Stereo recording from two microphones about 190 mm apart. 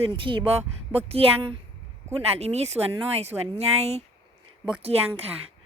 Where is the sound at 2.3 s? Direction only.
35° right (ahead or behind).